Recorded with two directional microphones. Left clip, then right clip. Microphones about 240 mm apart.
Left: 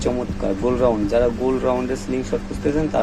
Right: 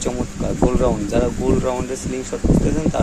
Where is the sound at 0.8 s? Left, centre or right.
Centre.